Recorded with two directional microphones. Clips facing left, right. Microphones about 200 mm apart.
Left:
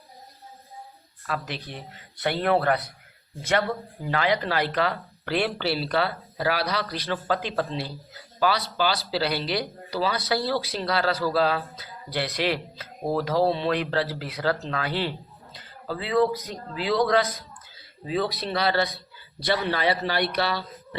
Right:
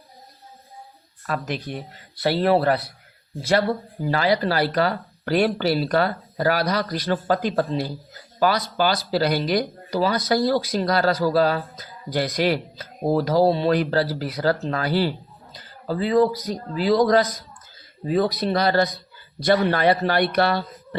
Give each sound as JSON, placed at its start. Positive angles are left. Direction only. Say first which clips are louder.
{"t": 1.5, "sound": "speech", "louder": "right 7 dB", "side_deg": -45}
{"t": 1.9, "sound": "speech", "louder": "right 4 dB", "side_deg": -35}